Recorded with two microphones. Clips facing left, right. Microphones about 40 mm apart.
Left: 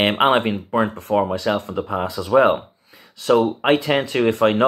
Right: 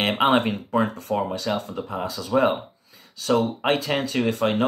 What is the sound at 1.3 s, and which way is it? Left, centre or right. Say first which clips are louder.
Speech: left 5 dB; left.